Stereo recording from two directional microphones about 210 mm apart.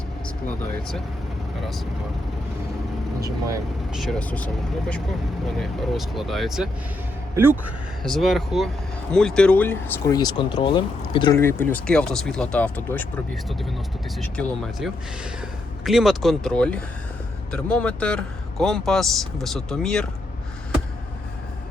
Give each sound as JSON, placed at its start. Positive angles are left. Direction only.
{"t": 1.6, "sound": "a man's voice", "side_deg": 0}
{"t": 3.2, "sound": "speech", "side_deg": -15}
{"t": 3.9, "sound": "a man's voice", "side_deg": 0}
{"t": 8.0, "sound": "a man's voice", "side_deg": 0}
{"t": 11.3, "sound": "a man's voice", "side_deg": 10}